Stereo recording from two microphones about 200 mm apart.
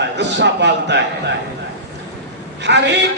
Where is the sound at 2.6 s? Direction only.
60° right (ahead or behind).